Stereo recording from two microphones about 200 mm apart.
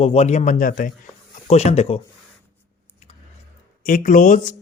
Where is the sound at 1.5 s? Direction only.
30° left (ahead or behind).